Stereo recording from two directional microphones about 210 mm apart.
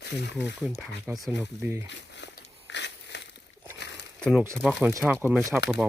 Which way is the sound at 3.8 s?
55° left (ahead or behind).